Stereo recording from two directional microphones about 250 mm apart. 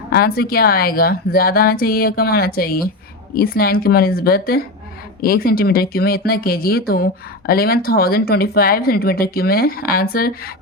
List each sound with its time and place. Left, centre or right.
0.1 s speech: left